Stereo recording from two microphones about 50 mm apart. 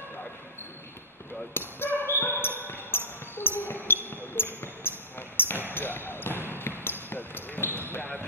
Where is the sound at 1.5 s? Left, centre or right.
Left.